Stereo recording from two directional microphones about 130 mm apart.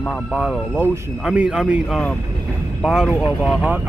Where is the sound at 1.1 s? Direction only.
5° right (ahead or behind).